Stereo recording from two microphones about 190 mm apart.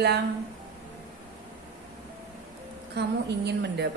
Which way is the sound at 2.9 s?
60° right (ahead or behind).